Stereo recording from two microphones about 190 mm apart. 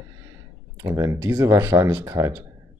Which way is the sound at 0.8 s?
15° right (ahead or behind).